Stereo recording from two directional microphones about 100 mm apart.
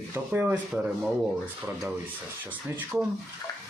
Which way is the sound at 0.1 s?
20° right (ahead or behind).